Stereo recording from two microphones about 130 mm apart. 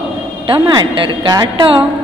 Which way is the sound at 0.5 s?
40° right (ahead or behind).